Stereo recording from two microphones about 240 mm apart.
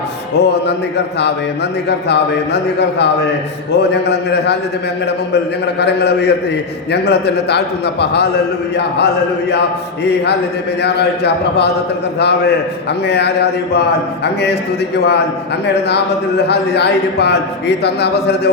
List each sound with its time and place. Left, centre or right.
0.3 s speech: left
5.8 s speech: left
9.5 s speech: left
14.9 s speech: left